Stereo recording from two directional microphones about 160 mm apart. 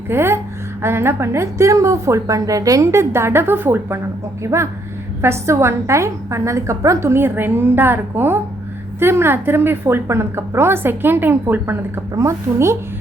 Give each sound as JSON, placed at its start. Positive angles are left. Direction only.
{"t": 0.1, "sound": "a woman's voice", "side_deg": -15}